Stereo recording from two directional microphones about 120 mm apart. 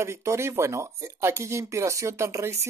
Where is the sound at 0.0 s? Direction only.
25° right (ahead or behind).